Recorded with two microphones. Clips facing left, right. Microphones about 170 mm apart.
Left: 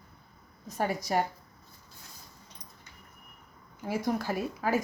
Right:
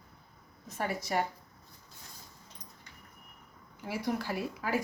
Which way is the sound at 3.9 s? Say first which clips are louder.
Left 3 dB; 45° left (ahead or behind).